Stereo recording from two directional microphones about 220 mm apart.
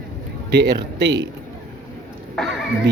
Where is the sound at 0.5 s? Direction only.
50° right (ahead or behind).